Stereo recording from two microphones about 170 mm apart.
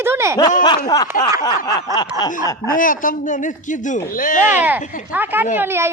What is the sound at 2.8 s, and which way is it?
A man's voice, 50° left (ahead or behind).